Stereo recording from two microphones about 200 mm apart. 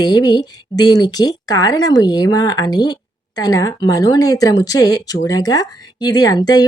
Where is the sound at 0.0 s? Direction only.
20° left (ahead or behind).